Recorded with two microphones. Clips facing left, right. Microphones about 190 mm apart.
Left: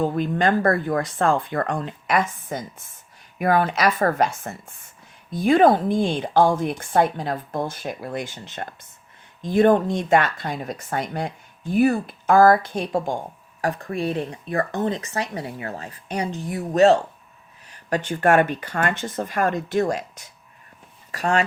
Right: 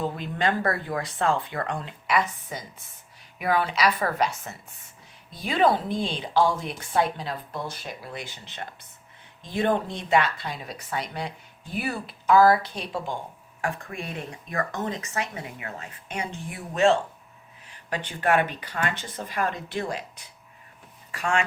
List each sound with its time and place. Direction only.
0.0 s speech: 45° left (ahead or behind)
13.6 s speech: 35° left (ahead or behind)